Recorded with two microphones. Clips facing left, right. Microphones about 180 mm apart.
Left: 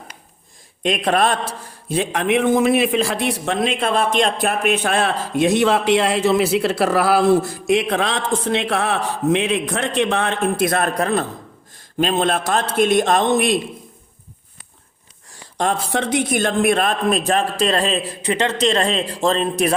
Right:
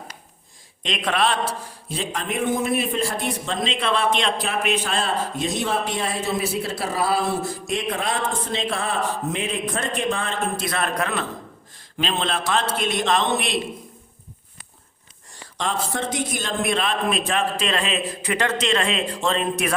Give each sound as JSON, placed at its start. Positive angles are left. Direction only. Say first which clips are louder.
{"t": 1.0, "sound": "a man's voice", "louder": "left 2 dB", "side_deg": 45}
{"t": 10.9, "sound": "a man's voice", "louder": "left 5 dB", "side_deg": 40}
{"t": 15.9, "sound": "a man's voice", "louder": "left 6 dB", "side_deg": 70}
{"t": 18.6, "sound": "a man's voice", "louder": "left 4 dB", "side_deg": 35}